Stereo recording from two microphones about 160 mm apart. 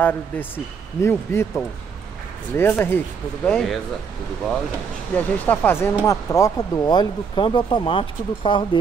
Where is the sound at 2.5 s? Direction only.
15° left (ahead or behind).